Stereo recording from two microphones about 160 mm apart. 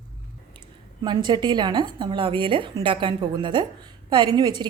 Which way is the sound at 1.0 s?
30° right (ahead or behind).